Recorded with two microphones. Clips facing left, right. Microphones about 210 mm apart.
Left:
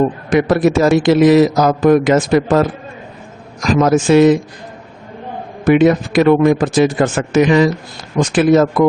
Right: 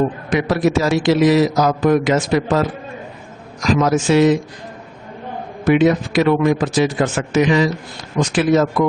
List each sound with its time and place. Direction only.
0.3 s a man's voice: 50° left (ahead or behind)
5.6 s a man's voice: 50° left (ahead or behind)